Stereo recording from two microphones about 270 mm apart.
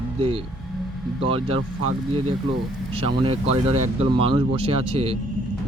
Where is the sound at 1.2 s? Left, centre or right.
Centre.